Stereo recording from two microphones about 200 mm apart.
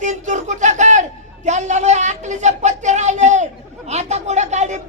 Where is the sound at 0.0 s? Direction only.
35° right (ahead or behind).